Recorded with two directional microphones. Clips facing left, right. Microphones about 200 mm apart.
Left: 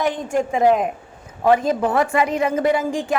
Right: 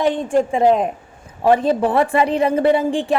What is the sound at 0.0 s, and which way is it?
A woman's voice, 30° right (ahead or behind).